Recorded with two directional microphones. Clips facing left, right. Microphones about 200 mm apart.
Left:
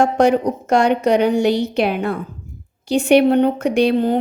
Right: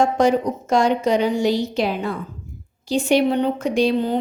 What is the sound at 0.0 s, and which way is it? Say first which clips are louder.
Speech: left 3 dB; 65° left (ahead or behind).